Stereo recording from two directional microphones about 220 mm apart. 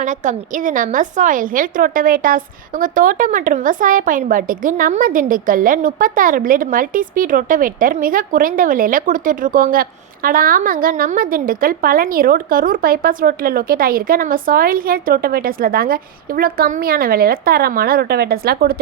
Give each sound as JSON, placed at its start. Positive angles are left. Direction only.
{"t": 0.0, "sound": "a woman's voice", "side_deg": -35}